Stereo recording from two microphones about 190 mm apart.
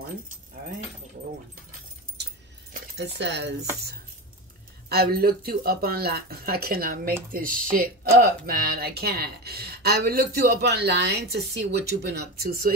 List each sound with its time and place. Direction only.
2.7 s speech: 65° right (ahead or behind)
4.8 s speech: 55° right (ahead or behind)